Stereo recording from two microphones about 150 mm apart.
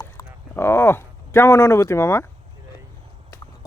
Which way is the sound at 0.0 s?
15° left (ahead or behind).